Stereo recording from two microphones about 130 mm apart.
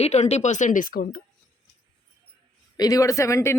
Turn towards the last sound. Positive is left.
turn(degrees=20)  # may be behind; listen again after turning